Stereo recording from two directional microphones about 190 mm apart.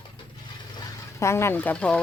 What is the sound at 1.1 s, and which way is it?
Speech, 15° left (ahead or behind).